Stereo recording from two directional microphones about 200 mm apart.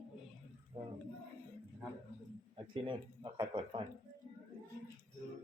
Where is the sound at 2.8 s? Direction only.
25° right (ahead or behind).